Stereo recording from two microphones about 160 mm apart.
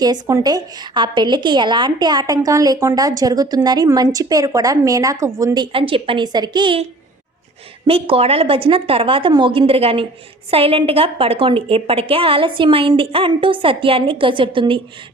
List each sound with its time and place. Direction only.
0.0 s a woman's voice: 25° right (ahead or behind)
5.7 s a woman's voice: 35° right (ahead or behind)
7.9 s a woman's voice: 35° right (ahead or behind)